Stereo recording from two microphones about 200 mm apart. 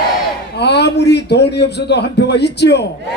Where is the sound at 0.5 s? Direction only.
55° left (ahead or behind).